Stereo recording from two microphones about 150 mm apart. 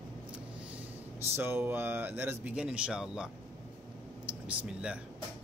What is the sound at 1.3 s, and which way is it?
Speech, 15° right (ahead or behind).